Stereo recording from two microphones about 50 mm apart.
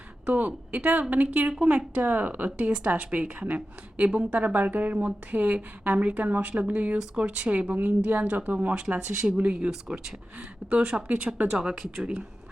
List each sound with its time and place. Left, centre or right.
0.3 s a woman's voice: right
9.2 s a woman's voice: centre